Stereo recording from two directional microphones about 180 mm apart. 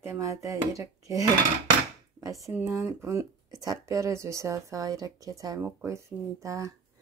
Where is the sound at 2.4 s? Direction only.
10° right (ahead or behind).